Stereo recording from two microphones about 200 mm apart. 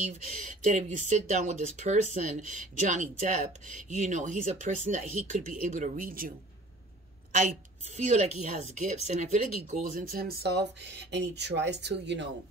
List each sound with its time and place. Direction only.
0.0 s speech: 35° right (ahead or behind)
7.9 s speech: 35° right (ahead or behind); by 12.3 s 60° right (ahead or behind)